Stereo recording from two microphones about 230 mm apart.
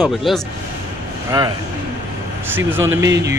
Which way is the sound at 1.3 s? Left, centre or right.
Centre.